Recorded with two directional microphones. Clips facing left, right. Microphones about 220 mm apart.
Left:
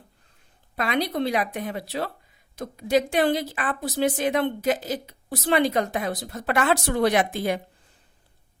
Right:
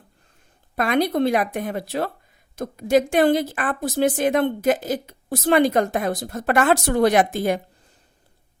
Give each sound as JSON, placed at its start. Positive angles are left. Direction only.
{"t": 0.8, "sound": "a woman's voice", "side_deg": -50}